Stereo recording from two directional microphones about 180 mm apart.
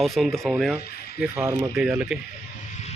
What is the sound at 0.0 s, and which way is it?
Speech, centre (ahead or behind).